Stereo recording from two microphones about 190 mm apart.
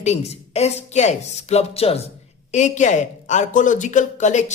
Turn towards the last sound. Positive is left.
turn(degrees=40)  # may be behind; listen again after turning